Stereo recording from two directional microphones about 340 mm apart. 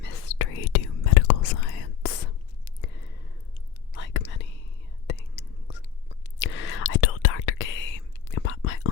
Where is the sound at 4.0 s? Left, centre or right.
Left.